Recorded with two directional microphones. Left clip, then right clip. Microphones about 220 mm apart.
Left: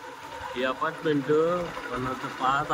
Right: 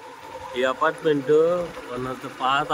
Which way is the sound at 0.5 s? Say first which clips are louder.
Right 7 dB; 35° right (ahead or behind).